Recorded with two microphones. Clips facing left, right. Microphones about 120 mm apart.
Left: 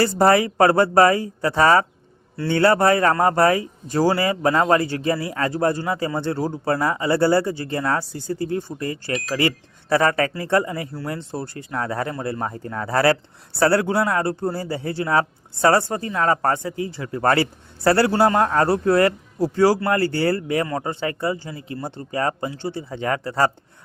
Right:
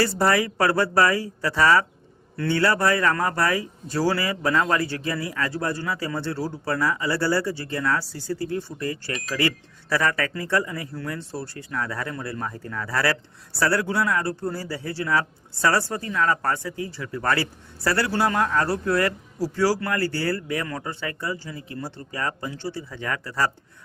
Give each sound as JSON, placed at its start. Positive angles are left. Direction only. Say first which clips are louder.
{"t": 0.0, "sound": "speech", "louder": "left 5 dB", "side_deg": 25}
{"t": 0.5, "sound": "speech", "louder": "left 6 dB", "side_deg": 45}
{"t": 0.8, "sound": "speech", "louder": "left 5 dB", "side_deg": 25}
{"t": 5.7, "sound": "speech", "louder": "left 4 dB", "side_deg": 20}
{"t": 16.1, "sound": "speech", "louder": "left 3 dB", "side_deg": 35}
{"t": 18.7, "sound": "speech", "louder": "left 6 dB", "side_deg": 25}